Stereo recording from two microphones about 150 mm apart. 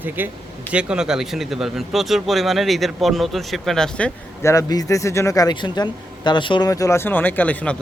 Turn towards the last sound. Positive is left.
turn(degrees=10)  # may be behind; listen again after turning